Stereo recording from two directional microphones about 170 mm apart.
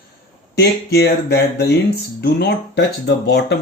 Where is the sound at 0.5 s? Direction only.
75° left (ahead or behind).